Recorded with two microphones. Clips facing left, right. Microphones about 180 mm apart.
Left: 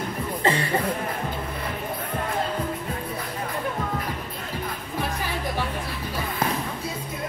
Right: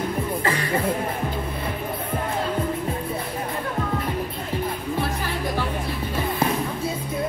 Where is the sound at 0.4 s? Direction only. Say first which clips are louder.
Left 1 dB; 25° left (ahead or behind).